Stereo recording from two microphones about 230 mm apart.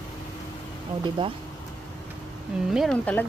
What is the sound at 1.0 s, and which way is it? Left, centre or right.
Speech, centre.